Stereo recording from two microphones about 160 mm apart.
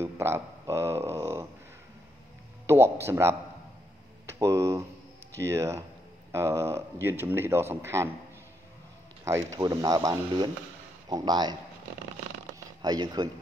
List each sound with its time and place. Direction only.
0.0 s speech: 15° right (ahead or behind)
2.6 s speech: 15° right (ahead or behind)
9.2 s speech: 20° right (ahead or behind)
12.8 s speech: 25° right (ahead or behind)